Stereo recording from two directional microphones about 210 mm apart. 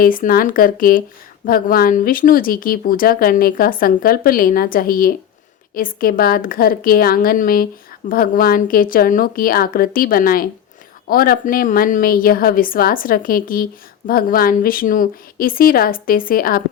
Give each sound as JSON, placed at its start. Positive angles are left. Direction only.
{"t": 0.0, "sound": "speech", "side_deg": 40}